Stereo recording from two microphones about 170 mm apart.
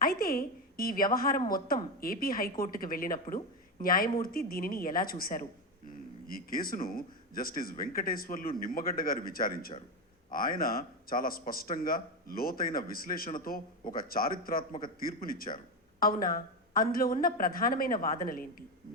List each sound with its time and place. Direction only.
0.0 s a man's voice: 60° left (ahead or behind)